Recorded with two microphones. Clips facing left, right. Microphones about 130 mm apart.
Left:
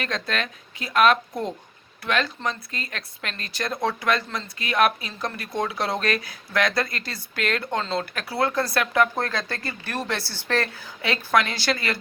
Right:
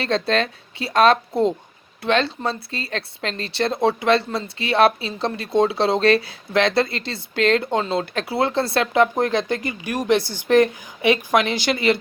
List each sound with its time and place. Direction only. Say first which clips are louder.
0.0 s speech: right 8 dB; 30° right (ahead or behind)